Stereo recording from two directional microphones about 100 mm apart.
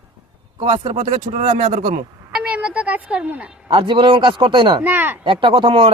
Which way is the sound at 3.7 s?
55° right (ahead or behind).